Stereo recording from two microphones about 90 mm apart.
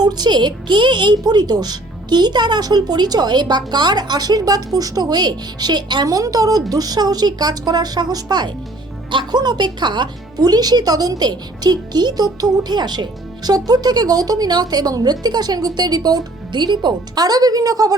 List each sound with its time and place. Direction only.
0.0 s speech: 50° right (ahead or behind)